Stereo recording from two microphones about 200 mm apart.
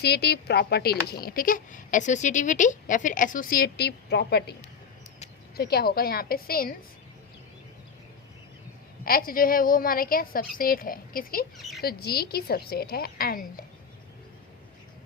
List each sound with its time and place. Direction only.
0.0 s a woman's voice: 55° left (ahead or behind)
5.5 s a woman's voice: 50° left (ahead or behind)
9.0 s a woman's voice: 45° left (ahead or behind)